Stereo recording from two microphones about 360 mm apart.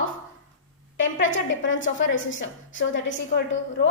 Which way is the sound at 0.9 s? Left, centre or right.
Left.